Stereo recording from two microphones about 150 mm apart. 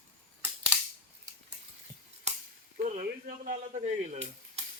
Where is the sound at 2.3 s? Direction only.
50° right (ahead or behind).